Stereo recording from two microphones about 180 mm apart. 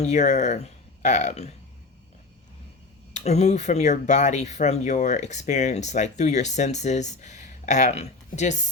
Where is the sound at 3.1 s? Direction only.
40° left (ahead or behind).